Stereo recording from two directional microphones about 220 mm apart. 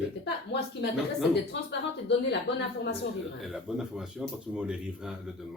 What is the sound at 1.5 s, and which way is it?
Speech, 55° left (ahead or behind).